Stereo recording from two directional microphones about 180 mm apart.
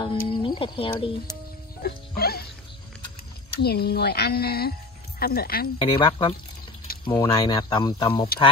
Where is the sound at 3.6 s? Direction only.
60° left (ahead or behind).